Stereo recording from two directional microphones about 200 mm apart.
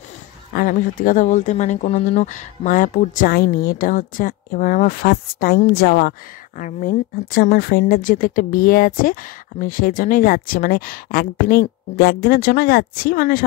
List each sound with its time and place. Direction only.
0.6 s speech: 45° left (ahead or behind)